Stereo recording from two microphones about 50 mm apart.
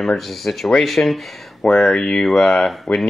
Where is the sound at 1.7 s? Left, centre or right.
Centre.